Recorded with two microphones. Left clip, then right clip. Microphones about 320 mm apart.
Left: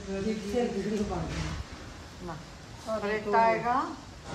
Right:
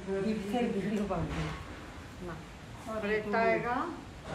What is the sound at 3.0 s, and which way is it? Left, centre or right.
Speech, centre.